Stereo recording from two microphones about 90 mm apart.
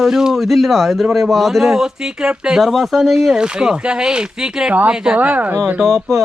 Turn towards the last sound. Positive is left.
turn(degrees=5)  # may be behind; listen again after turning